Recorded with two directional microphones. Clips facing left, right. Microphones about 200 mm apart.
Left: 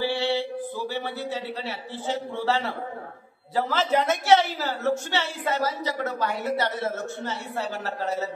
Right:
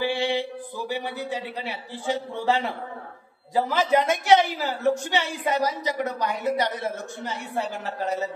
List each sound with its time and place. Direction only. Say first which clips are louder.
0.0 s a man's voice: even; 15° right (ahead or behind)